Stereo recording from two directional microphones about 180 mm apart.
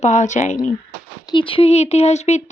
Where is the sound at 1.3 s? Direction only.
30° left (ahead or behind).